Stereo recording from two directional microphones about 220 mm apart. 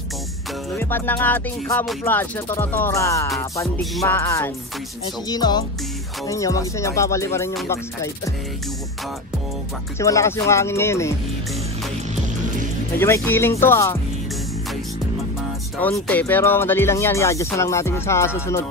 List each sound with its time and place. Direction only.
0.7 s speech: 10° left (ahead or behind)
5.3 s music: 20° left (ahead or behind)
6.2 s speech: 15° left (ahead or behind)
9.9 s speech: 15° left (ahead or behind)
13.0 s speech: 10° left (ahead or behind)
15.8 s speech: 5° left (ahead or behind)